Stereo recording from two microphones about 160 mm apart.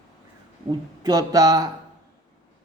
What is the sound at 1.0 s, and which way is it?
Speech, 25° right (ahead or behind).